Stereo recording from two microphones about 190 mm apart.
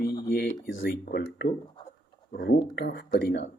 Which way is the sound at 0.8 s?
50° left (ahead or behind).